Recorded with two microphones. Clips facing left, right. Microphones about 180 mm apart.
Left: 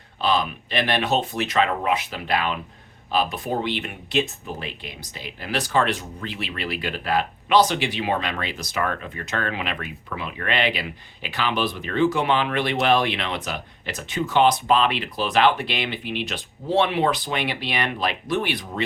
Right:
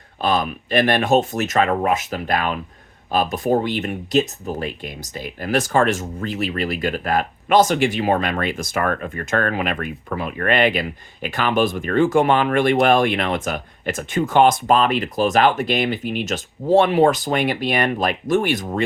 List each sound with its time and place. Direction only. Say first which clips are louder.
0.2 s speech: right 2 dB; 50° right (ahead or behind)